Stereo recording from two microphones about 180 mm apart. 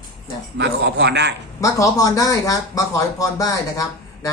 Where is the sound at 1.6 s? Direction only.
20° left (ahead or behind).